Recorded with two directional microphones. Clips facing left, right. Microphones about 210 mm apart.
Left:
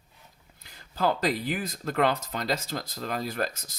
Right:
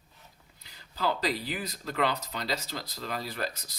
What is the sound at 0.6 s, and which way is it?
Speech, 50° left (ahead or behind).